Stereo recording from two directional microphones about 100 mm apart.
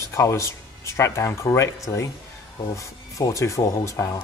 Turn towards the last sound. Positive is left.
turn(degrees=30)  # may be behind; listen again after turning